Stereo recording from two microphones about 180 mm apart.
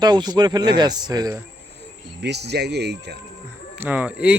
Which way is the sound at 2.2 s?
70° right (ahead or behind).